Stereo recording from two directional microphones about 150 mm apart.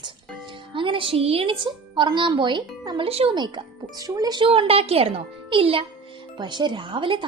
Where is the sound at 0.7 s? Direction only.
35° right (ahead or behind).